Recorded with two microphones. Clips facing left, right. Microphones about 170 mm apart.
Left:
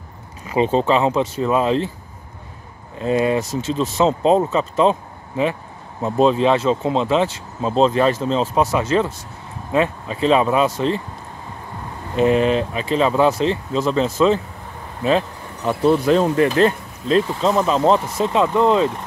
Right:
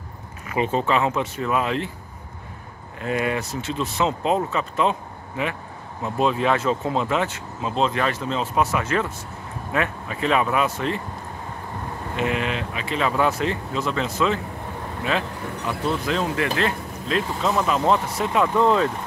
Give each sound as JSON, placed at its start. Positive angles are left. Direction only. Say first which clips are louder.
{"t": 0.5, "sound": "speech", "louder": "left 5 dB", "side_deg": 30}
{"t": 3.0, "sound": "speech", "louder": "left 6 dB", "side_deg": 30}
{"t": 6.0, "sound": "speech", "louder": "left 6 dB", "side_deg": 30}
{"t": 12.2, "sound": "speech", "louder": "left 10 dB", "side_deg": 35}